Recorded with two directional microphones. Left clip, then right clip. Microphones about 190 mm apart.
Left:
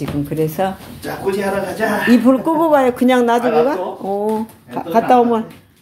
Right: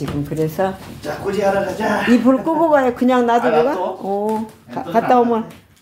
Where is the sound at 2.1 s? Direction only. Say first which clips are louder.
Left 2 dB; 10° left (ahead or behind).